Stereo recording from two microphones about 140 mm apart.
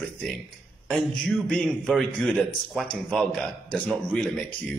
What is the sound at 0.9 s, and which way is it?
A man's voice, 5° left (ahead or behind).